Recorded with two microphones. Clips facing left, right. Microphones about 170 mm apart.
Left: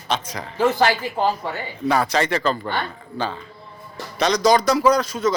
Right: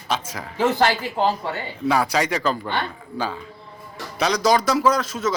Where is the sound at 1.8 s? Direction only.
5° right (ahead or behind).